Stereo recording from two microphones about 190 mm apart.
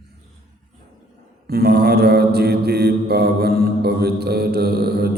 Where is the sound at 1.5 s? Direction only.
55° right (ahead or behind).